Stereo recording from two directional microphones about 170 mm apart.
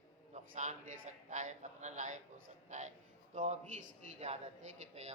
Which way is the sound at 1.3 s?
45° right (ahead or behind).